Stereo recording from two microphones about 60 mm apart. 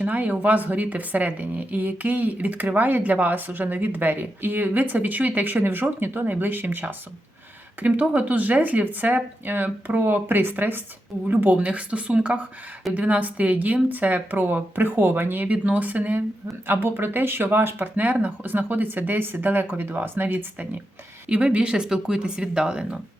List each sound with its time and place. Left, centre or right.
0.0 s a woman's voice: right
15.4 s a woman's voice: right
21.2 s speech: centre